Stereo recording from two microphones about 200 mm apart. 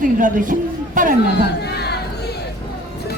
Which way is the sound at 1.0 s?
40° right (ahead or behind).